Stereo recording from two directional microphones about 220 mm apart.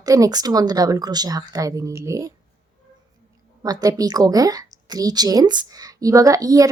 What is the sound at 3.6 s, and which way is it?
A woman's voice, 15° right (ahead or behind).